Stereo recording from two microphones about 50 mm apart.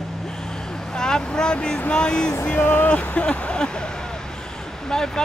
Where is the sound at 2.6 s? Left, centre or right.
Left.